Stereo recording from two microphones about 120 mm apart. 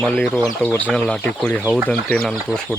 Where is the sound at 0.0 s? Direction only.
10° left (ahead or behind).